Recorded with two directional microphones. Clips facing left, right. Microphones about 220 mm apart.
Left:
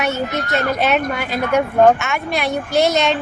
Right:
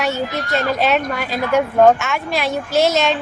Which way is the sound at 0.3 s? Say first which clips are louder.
Even; 20° left (ahead or behind).